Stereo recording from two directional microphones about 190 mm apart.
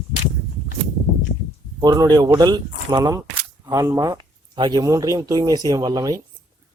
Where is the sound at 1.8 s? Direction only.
20° right (ahead or behind).